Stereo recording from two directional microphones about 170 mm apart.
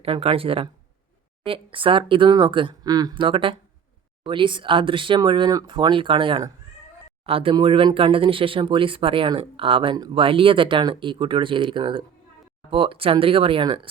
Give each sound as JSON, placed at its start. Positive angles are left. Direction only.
{"t": 0.0, "sound": "speech", "side_deg": -35}